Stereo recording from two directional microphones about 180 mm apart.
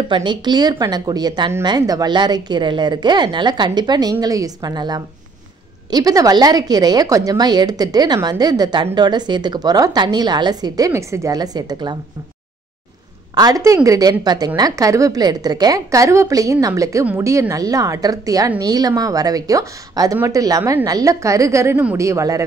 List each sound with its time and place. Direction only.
0.1 s a woman's voice: 25° right (ahead or behind)
13.3 s a woman's voice: 20° right (ahead or behind)